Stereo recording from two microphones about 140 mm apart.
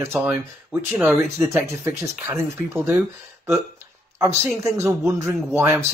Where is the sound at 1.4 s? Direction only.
20° right (ahead or behind).